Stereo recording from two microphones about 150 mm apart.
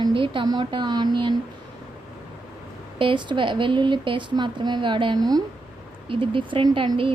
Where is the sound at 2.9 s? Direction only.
35° right (ahead or behind).